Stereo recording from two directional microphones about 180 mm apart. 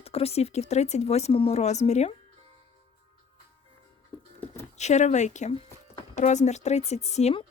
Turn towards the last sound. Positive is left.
turn(degrees=35)  # may be behind; listen again after turning